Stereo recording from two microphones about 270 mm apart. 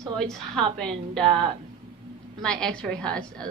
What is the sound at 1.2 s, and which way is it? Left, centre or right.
Speech, right.